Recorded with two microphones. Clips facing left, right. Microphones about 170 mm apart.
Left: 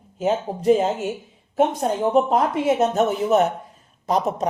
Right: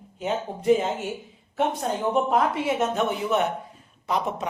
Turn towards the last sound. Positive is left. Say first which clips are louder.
# left 5 dB
turn(degrees=40)  # may be behind; listen again after turning